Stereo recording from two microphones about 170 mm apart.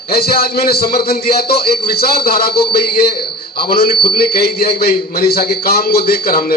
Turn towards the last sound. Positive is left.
turn(degrees=60)  # may be behind; listen again after turning